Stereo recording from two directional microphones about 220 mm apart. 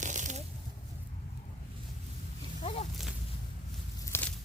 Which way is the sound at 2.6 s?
25° left (ahead or behind).